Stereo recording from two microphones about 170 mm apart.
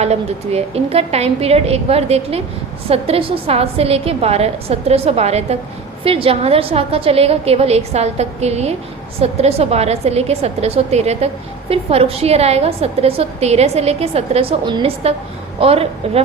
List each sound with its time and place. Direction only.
0.0 s a woman's voice: 40° right (ahead or behind)